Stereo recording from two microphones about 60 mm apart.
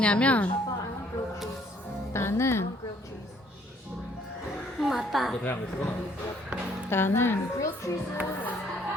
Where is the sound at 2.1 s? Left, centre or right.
Left.